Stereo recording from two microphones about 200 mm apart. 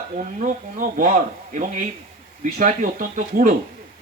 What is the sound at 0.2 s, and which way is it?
Speech, 40° right (ahead or behind).